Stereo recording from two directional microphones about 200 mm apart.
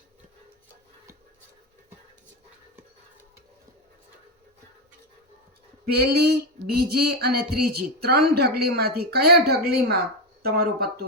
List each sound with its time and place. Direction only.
5.8 s female singing: 50° right (ahead or behind)